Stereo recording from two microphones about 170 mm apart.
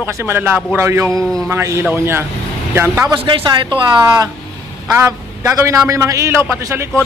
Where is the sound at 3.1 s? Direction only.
30° right (ahead or behind); by 6.9 s 15° right (ahead or behind).